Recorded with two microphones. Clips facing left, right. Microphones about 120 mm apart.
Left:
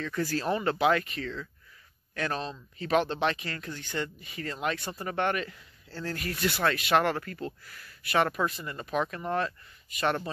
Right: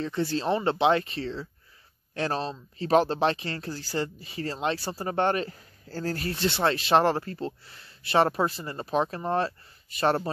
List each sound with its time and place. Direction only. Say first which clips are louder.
0.0 s speech: right 3 dB; 25° right (ahead or behind)